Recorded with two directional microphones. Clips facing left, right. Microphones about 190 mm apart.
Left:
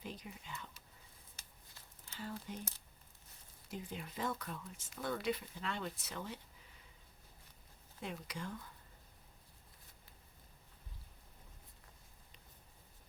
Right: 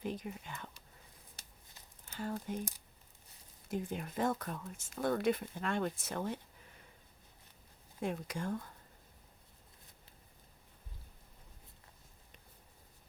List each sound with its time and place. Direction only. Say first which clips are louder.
0.0 s whispering: right 8 dB; 50° right (ahead or behind)
2.0 s a sound: right 6 dB; 50° right (ahead or behind)
2.6 s speech: right 7 dB; 15° right (ahead or behind)
3.7 s speech: right 7 dB; 50° right (ahead or behind)
8.0 s speech: right 7 dB; 50° right (ahead or behind)